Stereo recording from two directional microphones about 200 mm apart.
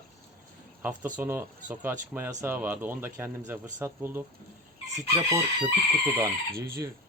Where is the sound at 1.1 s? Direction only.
10° right (ahead or behind).